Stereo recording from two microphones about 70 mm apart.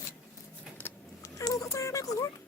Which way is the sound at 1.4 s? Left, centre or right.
Left.